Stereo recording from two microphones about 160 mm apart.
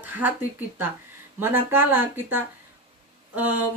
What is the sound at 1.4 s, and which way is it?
Speech, 15° right (ahead or behind).